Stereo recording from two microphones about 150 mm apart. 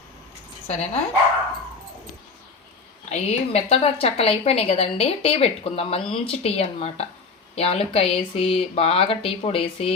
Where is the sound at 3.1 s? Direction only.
45° left (ahead or behind).